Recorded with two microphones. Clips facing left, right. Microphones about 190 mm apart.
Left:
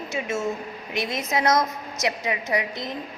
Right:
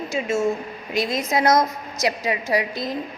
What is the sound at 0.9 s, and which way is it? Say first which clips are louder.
Speech: right 5 dB; 90° right.